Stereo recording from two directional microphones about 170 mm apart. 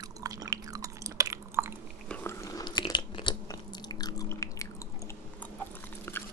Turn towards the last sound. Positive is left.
turn(degrees=20)  # may be behind; listen again after turning